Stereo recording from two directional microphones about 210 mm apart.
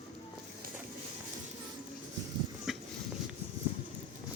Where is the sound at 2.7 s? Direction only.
Centre (ahead or behind).